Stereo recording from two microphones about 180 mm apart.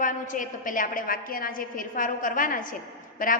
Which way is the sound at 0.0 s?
45° left (ahead or behind).